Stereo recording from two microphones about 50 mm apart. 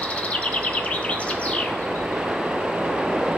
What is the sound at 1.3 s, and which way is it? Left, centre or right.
Bird, left.